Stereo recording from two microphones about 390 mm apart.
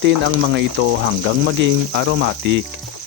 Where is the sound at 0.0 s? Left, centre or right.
Right.